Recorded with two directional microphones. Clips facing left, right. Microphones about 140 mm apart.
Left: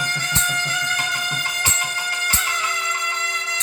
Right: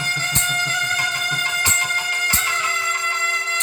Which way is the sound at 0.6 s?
15° left (ahead or behind).